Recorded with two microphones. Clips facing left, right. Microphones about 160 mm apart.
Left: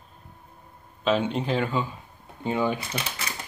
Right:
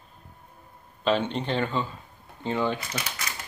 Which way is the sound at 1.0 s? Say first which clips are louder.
Left 1 dB; 5° left (ahead or behind).